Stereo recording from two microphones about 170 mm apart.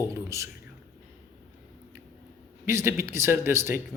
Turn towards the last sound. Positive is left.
turn(degrees=-15)  # may be behind; listen again after turning